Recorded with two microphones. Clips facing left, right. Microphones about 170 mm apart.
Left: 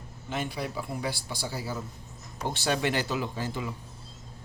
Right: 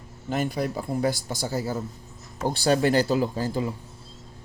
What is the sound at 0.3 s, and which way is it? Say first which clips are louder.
A man's voice: right 6 dB; 45° right (ahead or behind).